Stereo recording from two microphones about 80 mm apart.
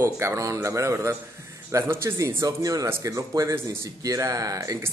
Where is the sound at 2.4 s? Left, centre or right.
Right.